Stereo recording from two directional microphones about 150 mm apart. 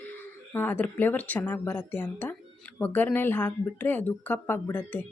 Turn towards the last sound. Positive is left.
turn(degrees=10)  # may be behind; listen again after turning